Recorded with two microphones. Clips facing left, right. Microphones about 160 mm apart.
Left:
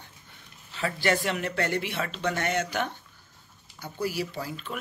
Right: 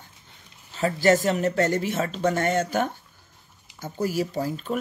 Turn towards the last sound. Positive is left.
turn(degrees=-40)  # may be behind; listen again after turning